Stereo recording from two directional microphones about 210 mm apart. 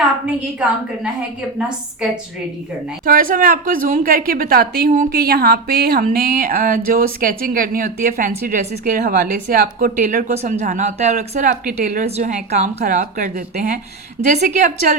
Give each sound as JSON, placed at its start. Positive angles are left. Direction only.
{"t": 3.1, "sound": "a woman's voice", "side_deg": -40}